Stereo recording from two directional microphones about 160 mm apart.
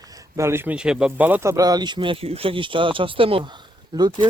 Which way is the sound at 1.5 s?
25° right (ahead or behind).